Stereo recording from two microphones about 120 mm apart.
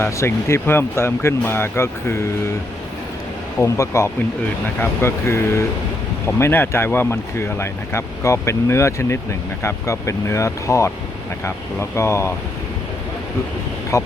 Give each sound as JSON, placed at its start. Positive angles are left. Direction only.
{"t": 0.0, "sound": "speech", "side_deg": 20}
{"t": 3.6, "sound": "speech", "side_deg": 25}
{"t": 13.9, "sound": "speech", "side_deg": 25}